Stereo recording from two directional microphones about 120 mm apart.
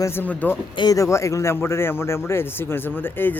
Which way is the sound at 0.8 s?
30° left (ahead or behind).